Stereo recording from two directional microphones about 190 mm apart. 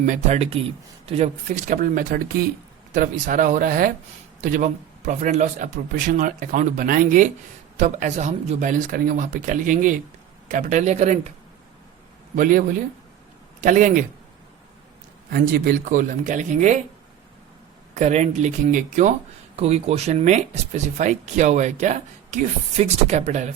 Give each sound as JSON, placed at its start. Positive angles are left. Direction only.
{"t": 0.0, "sound": "a man's voice", "side_deg": -40}
{"t": 12.4, "sound": "a man's voice", "side_deg": -45}
{"t": 15.3, "sound": "a man's voice", "side_deg": -55}
{"t": 17.9, "sound": "speech", "side_deg": -35}